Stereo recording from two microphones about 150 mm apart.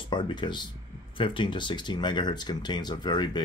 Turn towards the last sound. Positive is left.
turn(degrees=30)  # may be behind; listen again after turning